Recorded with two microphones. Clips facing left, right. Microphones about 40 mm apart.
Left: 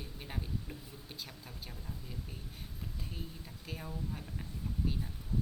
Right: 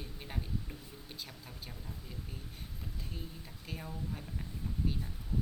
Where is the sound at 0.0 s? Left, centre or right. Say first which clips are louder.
Even; centre.